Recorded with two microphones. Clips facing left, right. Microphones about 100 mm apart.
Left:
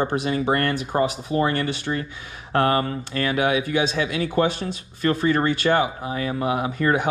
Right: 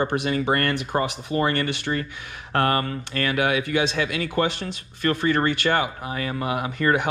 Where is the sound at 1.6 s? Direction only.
65° right (ahead or behind).